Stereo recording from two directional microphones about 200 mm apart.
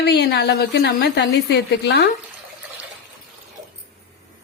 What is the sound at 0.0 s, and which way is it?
A woman's voice, 55° left (ahead or behind).